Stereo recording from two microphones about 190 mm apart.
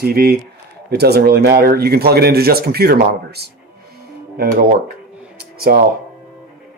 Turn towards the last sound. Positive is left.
turn(degrees=-50)  # may be behind; listen again after turning